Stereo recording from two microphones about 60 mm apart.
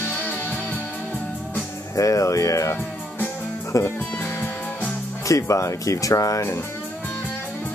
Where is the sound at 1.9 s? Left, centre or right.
Left.